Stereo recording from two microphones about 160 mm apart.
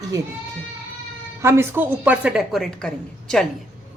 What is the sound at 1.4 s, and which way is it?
A woman's voice, 15° right (ahead or behind).